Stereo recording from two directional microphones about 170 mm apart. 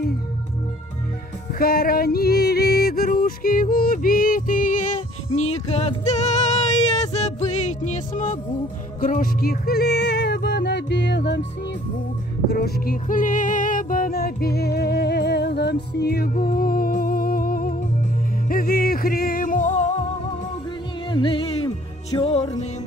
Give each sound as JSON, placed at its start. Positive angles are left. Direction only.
{"t": 1.5, "sound": "yodeling", "side_deg": 60}
{"t": 9.0, "sound": "music", "side_deg": 55}
{"t": 12.4, "sound": "music", "side_deg": 65}
{"t": 21.1, "sound": "music", "side_deg": 30}
{"t": 22.2, "sound": "music", "side_deg": 40}